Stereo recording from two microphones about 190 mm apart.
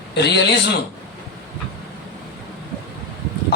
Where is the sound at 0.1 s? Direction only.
65° left (ahead or behind).